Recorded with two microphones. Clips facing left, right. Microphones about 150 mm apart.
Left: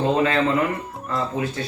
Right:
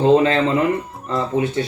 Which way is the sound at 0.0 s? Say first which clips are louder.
Right 5 dB; 25° right (ahead or behind).